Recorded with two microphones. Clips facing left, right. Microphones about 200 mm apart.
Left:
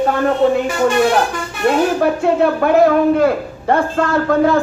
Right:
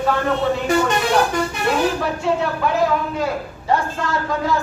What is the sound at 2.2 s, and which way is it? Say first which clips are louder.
A man's voice: left 4 dB; 55° left (ahead or behind).